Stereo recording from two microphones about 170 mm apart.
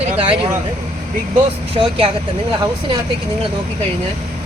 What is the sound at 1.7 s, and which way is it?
Speech, 30° right (ahead or behind).